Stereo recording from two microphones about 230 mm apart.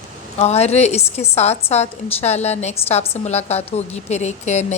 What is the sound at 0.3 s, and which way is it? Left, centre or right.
A woman's voice, left.